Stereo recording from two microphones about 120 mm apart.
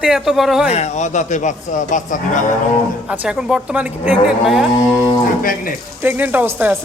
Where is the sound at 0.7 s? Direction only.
65° left (ahead or behind); by 2.5 s 90° left.